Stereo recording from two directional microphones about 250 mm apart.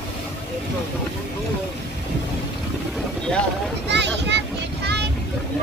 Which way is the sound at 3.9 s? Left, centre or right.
Right.